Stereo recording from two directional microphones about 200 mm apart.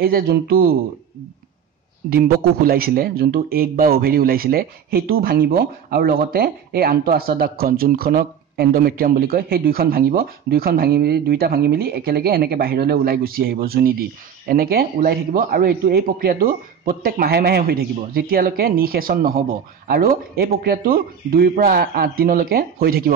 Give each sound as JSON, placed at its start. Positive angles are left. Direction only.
{"t": 0.0, "sound": "speech", "side_deg": -50}
{"t": 2.0, "sound": "speech", "side_deg": -45}